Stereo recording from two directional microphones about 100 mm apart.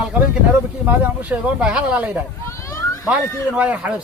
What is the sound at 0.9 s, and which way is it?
Speech, 15° right (ahead or behind).